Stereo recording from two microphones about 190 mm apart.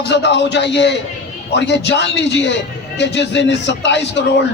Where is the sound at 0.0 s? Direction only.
65° left (ahead or behind).